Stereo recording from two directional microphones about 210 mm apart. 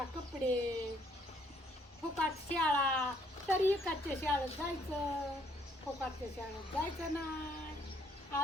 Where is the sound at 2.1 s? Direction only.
5° left (ahead or behind).